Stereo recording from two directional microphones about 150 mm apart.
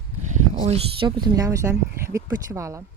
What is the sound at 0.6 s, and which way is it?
A woman's voice, 40° right (ahead or behind).